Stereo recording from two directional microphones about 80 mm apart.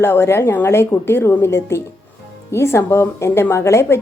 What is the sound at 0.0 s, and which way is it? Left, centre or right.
A woman's voice, left.